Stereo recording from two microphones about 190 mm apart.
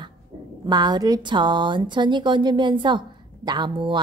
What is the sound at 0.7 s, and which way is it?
Speech, 20° right (ahead or behind).